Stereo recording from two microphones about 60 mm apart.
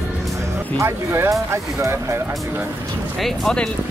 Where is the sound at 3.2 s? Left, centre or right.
Centre.